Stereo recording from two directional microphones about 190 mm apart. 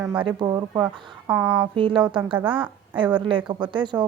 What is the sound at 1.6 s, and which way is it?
A woman's voice, 25° right (ahead or behind).